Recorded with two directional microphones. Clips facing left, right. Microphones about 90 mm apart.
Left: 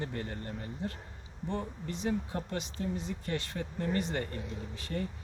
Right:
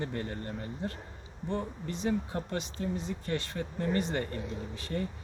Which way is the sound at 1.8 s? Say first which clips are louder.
Right 1 dB; 35° right (ahead or behind).